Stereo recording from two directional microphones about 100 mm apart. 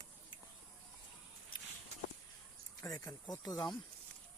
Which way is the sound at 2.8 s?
35° left (ahead or behind).